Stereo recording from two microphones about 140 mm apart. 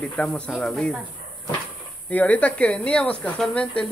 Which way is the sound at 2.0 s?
10° left (ahead or behind).